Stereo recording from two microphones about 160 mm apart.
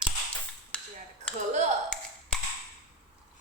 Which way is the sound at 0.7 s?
5° left (ahead or behind).